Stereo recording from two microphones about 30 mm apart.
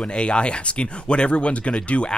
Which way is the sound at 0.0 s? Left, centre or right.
Left.